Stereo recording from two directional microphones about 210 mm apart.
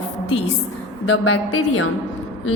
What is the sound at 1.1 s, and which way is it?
Speech, 75° left (ahead or behind).